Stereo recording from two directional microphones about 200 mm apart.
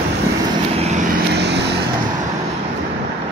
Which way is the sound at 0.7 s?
35° right (ahead or behind).